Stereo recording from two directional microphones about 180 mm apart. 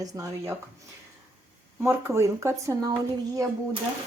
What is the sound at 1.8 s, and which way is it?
Speech, 15° right (ahead or behind).